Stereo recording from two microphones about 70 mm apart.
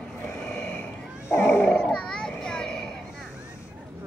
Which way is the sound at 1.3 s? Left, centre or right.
Left.